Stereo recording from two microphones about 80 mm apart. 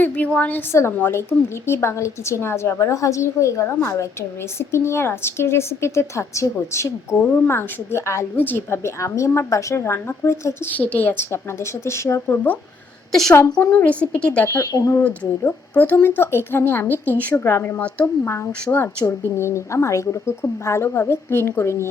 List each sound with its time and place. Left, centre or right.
0.0 s a woman's voice: centre
0.7 s a woman's voice: left
8.4 s a woman's voice: left
10.7 s a woman's voice: left
13.1 s a woman's voice: centre
13.3 s a woman's voice: left
13.7 s a woman's voice: centre
14.4 s a woman's voice: left
15.0 s a woman's voice: centre; by 21.8 s left